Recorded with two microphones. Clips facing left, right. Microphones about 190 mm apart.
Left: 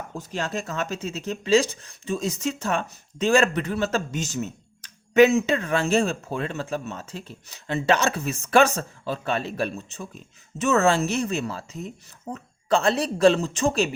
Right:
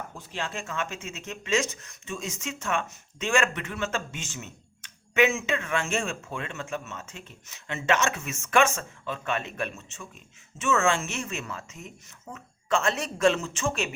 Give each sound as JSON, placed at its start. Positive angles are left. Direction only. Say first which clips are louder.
{"t": 0.1, "sound": "speech", "louder": "left 6 dB", "side_deg": 40}